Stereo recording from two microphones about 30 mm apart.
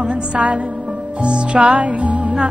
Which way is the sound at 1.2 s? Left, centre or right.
Right.